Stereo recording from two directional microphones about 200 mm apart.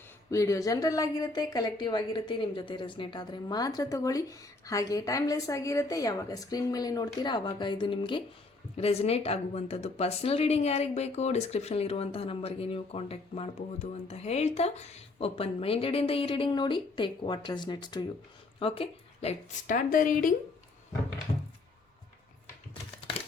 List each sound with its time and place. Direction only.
0.3 s a woman's voice: 15° left (ahead or behind); by 20.3 s 45° left (ahead or behind)